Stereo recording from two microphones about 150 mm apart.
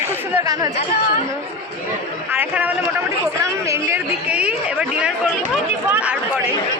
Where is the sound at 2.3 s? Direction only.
10° right (ahead or behind).